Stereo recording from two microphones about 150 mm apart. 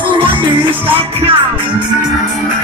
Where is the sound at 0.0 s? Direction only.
35° right (ahead or behind).